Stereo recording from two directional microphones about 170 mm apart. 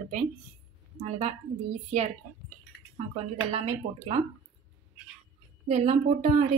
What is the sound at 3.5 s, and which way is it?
Speech, 35° right (ahead or behind).